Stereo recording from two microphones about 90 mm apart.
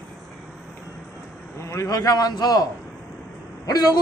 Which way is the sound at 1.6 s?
35° left (ahead or behind).